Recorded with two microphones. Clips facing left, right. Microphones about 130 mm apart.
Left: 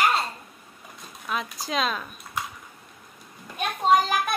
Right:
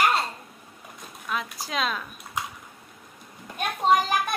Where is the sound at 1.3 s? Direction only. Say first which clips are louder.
Left 2 dB; centre (ahead or behind).